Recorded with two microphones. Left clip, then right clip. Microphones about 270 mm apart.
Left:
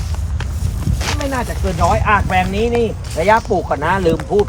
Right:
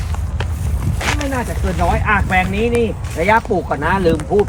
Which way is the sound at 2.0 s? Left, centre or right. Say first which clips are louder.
Left 1 dB; left.